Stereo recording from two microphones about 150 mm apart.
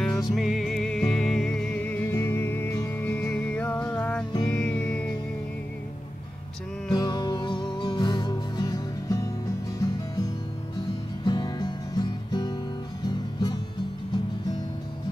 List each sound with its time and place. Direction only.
0.0 s music: centre (ahead or behind)
6.9 s music: 25° left (ahead or behind)
11.2 s music: 30° left (ahead or behind)